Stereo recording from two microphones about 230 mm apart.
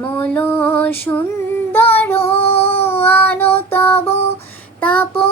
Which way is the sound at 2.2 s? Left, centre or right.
Centre.